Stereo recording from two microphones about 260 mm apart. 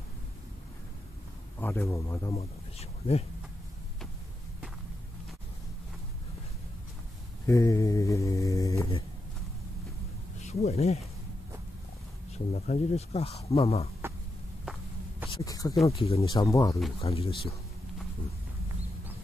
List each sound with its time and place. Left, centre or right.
1.6 s speech: centre
2.3 s speech: left
7.4 s dog: centre
10.4 s speech: left
12.5 s speech: left
14.6 s walk: centre
15.4 s speech: centre
17.0 s speech: left